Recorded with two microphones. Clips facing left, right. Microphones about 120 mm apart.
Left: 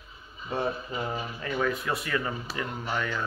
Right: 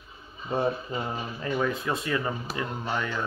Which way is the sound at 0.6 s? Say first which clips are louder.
Right 3 dB; 25° right (ahead or behind).